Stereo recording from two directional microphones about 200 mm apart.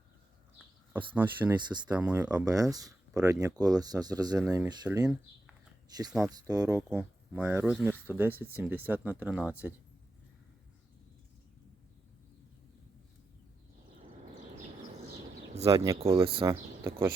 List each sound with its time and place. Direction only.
1.1 s speech: 10° right (ahead or behind)
2.5 s speech: 20° right (ahead or behind)
6.1 s speech: 5° right (ahead or behind)
6.3 s speech: 15° right (ahead or behind)
15.5 s speech: 30° right (ahead or behind)
16.5 s speech: 15° right (ahead or behind)